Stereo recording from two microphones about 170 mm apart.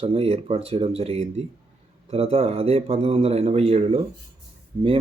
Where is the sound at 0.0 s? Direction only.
35° right (ahead or behind).